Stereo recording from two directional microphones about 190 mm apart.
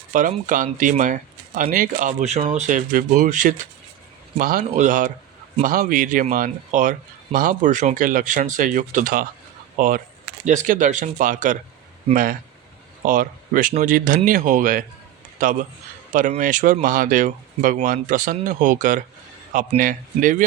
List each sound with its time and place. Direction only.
0.1 s speech: 45° right (ahead or behind)